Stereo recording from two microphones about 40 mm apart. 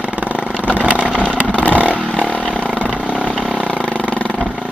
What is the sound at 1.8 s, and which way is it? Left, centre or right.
Vehicle, right.